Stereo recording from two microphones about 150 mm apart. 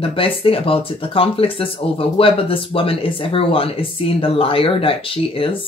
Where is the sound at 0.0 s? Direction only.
35° left (ahead or behind).